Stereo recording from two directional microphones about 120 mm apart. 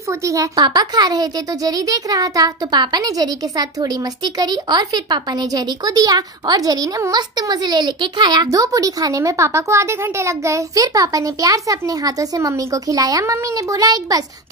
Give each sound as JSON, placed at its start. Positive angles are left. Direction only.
{"t": 0.2, "sound": "speech", "side_deg": -25}